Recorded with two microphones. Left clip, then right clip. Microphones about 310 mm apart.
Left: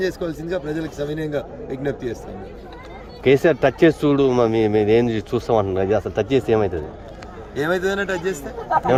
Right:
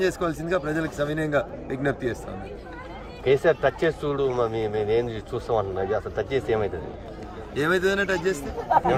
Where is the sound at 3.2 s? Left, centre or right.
Left.